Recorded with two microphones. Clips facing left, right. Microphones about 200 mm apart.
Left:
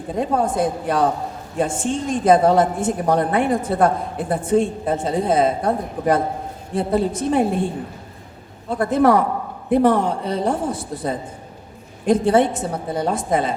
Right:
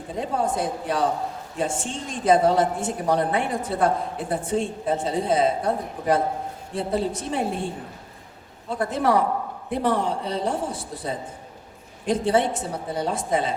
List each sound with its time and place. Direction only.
0.2 s a woman's voice: 50° left (ahead or behind)
8.7 s a woman's voice: 50° left (ahead or behind)